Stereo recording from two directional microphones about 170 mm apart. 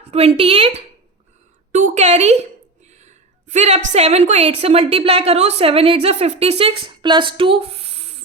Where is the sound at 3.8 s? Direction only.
40° right (ahead or behind).